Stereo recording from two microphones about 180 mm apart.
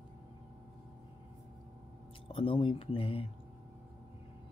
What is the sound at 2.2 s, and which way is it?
Speech, 30° left (ahead or behind).